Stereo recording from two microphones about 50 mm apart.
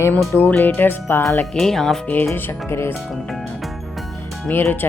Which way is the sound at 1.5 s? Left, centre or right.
Centre.